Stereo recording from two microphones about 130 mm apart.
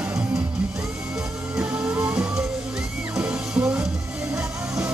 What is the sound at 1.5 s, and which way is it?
Music, 5° right (ahead or behind).